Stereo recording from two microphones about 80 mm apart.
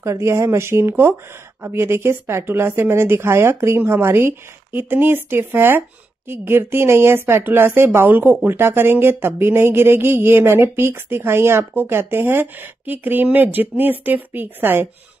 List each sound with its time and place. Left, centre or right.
0.0 s speech: right